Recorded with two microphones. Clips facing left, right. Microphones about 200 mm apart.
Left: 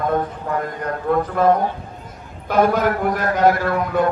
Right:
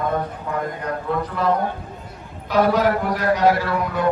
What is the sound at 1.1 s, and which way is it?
A man's voice, 50° left (ahead or behind).